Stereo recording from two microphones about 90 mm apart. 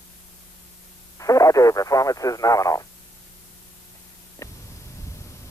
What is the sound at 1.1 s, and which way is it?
Speech, 40° left (ahead or behind).